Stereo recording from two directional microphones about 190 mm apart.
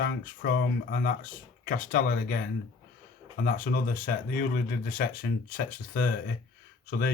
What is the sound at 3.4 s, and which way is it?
Speech, 50° left (ahead or behind).